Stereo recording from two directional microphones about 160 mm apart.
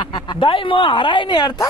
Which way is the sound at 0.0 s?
30° left (ahead or behind).